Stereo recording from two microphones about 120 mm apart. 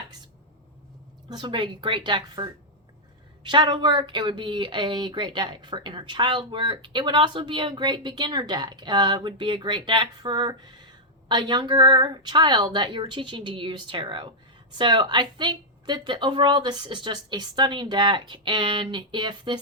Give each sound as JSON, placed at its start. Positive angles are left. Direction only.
{"t": 1.3, "sound": "speech", "side_deg": -40}